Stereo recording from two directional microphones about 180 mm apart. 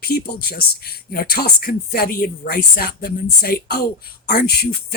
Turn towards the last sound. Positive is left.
turn(degrees=55)  # may be behind; listen again after turning